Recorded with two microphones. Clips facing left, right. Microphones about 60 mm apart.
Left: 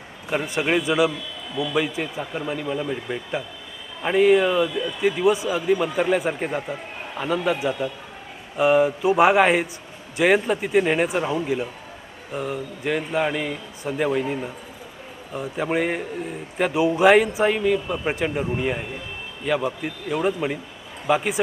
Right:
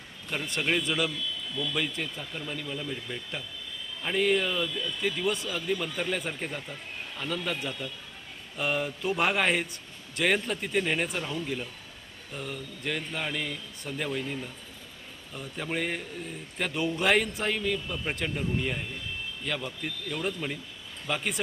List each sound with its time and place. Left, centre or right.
0.3 s a man's voice: centre
4.0 s a man's voice: centre
15.6 s a man's voice: centre